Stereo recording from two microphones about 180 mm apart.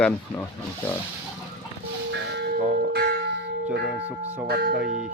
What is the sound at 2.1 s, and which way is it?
Bell, 75° right (ahead or behind).